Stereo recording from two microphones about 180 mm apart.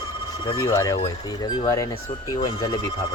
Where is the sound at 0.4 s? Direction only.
20° left (ahead or behind).